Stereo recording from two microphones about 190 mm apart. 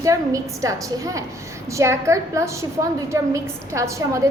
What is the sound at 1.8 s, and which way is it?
A woman's voice, 15° right (ahead or behind).